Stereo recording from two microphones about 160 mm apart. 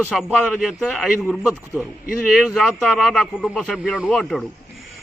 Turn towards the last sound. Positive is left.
turn(degrees=5)  # may be behind; listen again after turning